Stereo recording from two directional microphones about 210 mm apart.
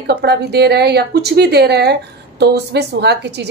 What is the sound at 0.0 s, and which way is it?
Speech, 50° right (ahead or behind).